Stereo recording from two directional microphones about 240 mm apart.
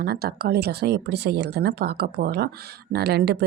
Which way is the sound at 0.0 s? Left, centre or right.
Right.